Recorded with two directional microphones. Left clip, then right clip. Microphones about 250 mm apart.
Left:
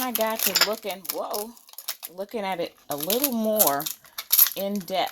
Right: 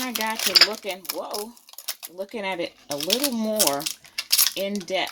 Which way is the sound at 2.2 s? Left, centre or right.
Left.